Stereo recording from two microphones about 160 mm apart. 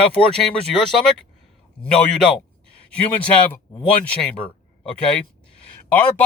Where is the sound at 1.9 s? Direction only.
5° left (ahead or behind).